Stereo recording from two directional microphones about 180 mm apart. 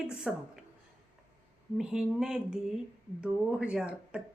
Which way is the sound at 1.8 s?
5° right (ahead or behind).